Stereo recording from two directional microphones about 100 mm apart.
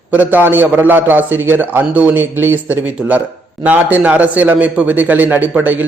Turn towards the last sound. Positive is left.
turn(degrees=-15)  # may be behind; listen again after turning